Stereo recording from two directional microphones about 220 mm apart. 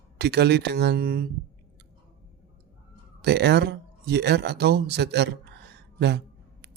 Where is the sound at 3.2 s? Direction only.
50° right (ahead or behind).